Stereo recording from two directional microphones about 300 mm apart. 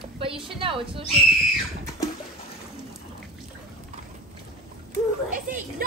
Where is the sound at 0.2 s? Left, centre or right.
Centre.